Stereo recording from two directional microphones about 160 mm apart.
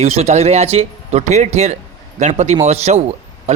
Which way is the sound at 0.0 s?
40° right (ahead or behind).